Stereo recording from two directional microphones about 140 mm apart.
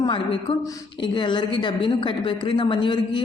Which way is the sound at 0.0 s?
35° left (ahead or behind).